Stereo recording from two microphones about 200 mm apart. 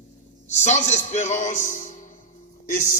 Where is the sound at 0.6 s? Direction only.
35° left (ahead or behind).